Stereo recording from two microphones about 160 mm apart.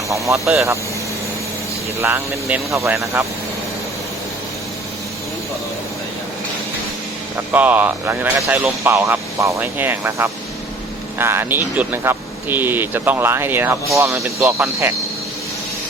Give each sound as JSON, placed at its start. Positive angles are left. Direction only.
{"t": 0.1, "sound": "speech", "side_deg": -20}
{"t": 2.0, "sound": "speech", "side_deg": -15}
{"t": 7.3, "sound": "speech", "side_deg": -10}